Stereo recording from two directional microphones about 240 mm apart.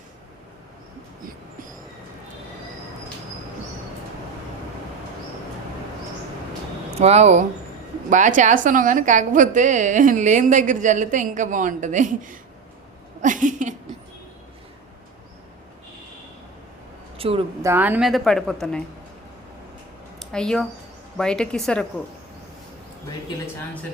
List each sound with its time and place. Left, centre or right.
7.0 s a woman's voice: right
17.2 s a woman's voice: right
17.6 s a woman's voice: centre
20.3 s a woman's voice: centre